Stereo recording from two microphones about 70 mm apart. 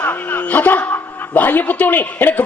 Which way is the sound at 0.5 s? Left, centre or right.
Left.